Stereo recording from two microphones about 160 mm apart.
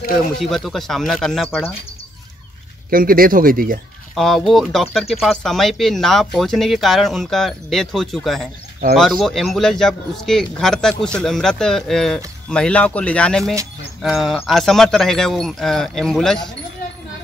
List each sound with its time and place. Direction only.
0.4 s speech: centre (ahead or behind)
2.9 s speech: 65° right (ahead or behind)
4.1 s speech: centre (ahead or behind)